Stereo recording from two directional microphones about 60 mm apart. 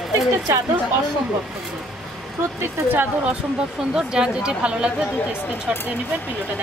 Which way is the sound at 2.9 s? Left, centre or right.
Right.